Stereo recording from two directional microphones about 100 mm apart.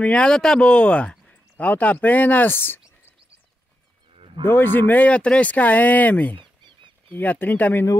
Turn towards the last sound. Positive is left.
turn(degrees=20)  # may be behind; listen again after turning